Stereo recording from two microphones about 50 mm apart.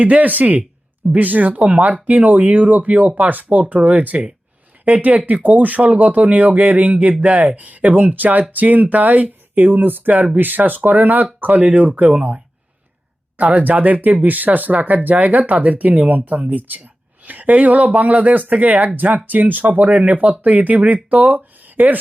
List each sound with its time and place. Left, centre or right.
0.0 s speech: right